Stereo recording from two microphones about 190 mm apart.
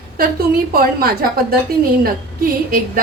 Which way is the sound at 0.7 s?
50° right (ahead or behind).